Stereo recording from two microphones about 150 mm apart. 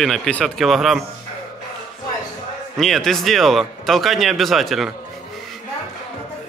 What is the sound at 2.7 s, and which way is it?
Speech, centre (ahead or behind).